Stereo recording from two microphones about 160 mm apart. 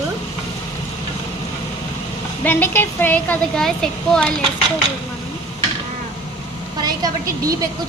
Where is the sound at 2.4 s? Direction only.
10° left (ahead or behind).